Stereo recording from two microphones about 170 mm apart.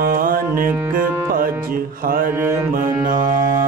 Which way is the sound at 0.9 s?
55° right (ahead or behind).